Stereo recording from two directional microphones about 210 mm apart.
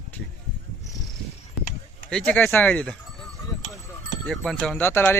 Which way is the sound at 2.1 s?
5° left (ahead or behind).